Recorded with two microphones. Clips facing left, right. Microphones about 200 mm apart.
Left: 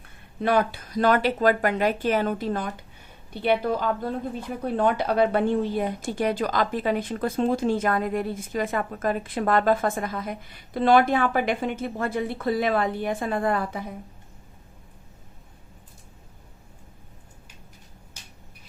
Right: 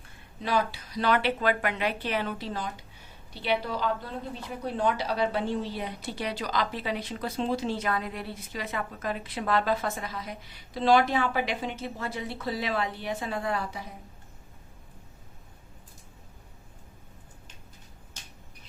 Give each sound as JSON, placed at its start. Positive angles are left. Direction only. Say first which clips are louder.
{"t": 0.3, "sound": "a woman's voice", "louder": "left 6 dB", "side_deg": 55}